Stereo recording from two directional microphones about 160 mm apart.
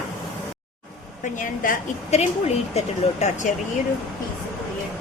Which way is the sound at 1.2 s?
55° left (ahead or behind).